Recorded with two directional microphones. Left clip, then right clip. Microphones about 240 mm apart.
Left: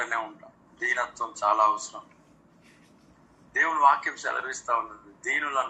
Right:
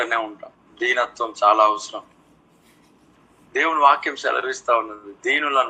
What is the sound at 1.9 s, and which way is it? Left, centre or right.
Speech, right.